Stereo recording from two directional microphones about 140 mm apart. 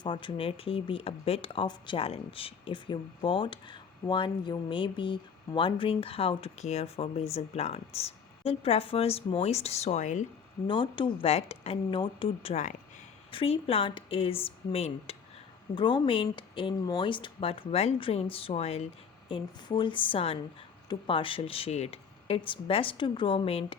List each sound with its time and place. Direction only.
0.0 s speech: 35° left (ahead or behind); by 10.2 s 60° left (ahead or behind)
10.7 s speech: 35° left (ahead or behind)
15.7 s speech: 35° left (ahead or behind); by 18.8 s 50° left (ahead or behind)
19.3 s speech: 35° left (ahead or behind)